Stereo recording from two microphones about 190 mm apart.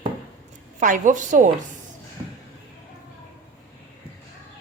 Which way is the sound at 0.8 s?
40° right (ahead or behind).